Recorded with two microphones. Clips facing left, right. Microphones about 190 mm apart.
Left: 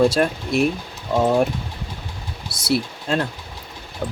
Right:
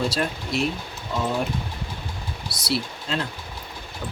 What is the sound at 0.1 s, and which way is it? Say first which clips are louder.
Speech: left 6 dB; 50° left (ahead or behind).